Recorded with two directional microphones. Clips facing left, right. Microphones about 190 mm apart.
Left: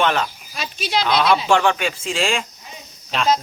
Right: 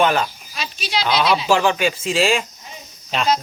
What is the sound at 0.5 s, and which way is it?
Speech, 50° left (ahead or behind).